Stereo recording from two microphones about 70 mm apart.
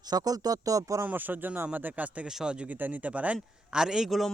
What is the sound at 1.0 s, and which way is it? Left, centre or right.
A man's voice, right.